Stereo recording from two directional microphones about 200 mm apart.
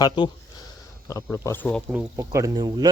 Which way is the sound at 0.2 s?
20° left (ahead or behind).